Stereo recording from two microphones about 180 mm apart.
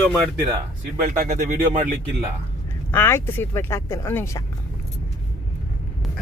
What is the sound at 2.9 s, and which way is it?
Speech, 10° left (ahead or behind).